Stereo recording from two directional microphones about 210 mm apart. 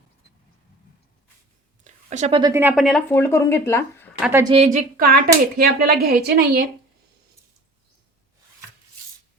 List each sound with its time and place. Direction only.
1.8 s a sound: 35° right (ahead or behind)
2.4 s speech: 10° right (ahead or behind)
3.1 s speech: 10° left (ahead or behind)
4.2 s a woman's voice: 10° right (ahead or behind)
4.4 s speech: 30° right (ahead or behind); by 6.7 s 50° right (ahead or behind)